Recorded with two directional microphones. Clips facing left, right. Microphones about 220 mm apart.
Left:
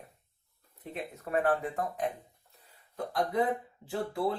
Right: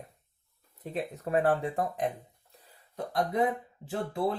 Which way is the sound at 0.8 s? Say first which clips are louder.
Right 5 dB; 30° right (ahead or behind).